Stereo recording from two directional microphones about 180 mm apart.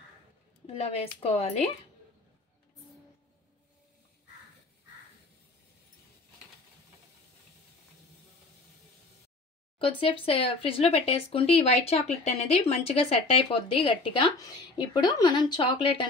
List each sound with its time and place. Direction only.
0.7 s speech: 35° left (ahead or behind)
9.8 s a woman's voice: 30° left (ahead or behind)